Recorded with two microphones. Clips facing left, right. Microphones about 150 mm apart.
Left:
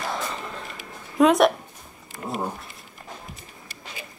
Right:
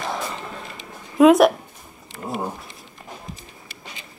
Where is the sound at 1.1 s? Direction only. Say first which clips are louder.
Right 4 dB; centre (ahead or behind).